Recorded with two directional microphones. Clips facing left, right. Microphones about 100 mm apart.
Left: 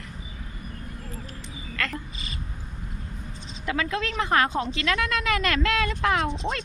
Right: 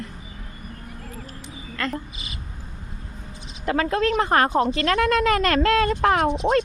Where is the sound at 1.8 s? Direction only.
30° right (ahead or behind).